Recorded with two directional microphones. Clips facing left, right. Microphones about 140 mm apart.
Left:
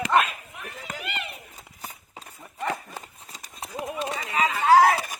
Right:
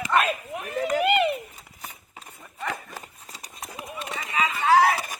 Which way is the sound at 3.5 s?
30° left (ahead or behind).